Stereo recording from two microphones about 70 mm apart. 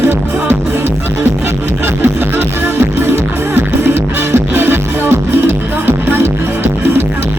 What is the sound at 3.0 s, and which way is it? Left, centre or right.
Music, right.